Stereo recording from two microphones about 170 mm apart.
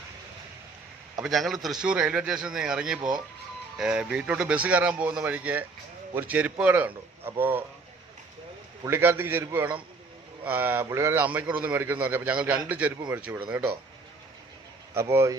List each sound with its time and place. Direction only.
1.2 s a man's voice: centre (ahead or behind)
8.8 s speech: 15° right (ahead or behind)
14.9 s speech: 15° right (ahead or behind)